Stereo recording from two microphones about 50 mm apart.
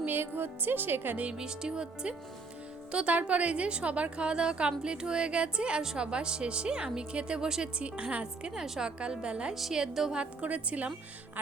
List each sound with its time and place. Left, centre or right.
0.0 s speech: right
1.1 s a woman's voice: right
1.4 s a woman's voice: centre
9.6 s speech: centre
10.2 s a woman's voice: right